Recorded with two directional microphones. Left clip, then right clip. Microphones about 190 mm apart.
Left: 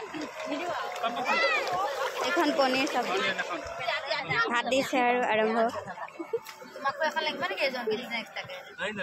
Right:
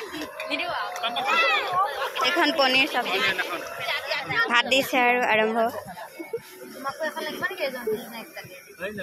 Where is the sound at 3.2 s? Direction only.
55° left (ahead or behind).